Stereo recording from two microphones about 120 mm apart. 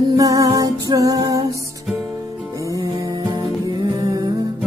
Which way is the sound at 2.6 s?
25° right (ahead or behind).